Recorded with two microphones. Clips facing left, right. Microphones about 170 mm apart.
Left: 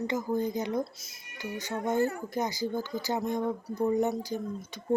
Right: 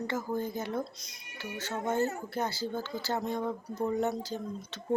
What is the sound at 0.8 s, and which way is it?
Speech, 5° left (ahead or behind).